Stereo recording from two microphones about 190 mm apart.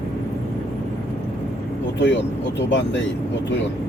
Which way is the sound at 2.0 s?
70° left (ahead or behind).